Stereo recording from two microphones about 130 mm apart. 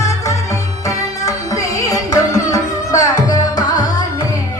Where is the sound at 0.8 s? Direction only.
25° left (ahead or behind).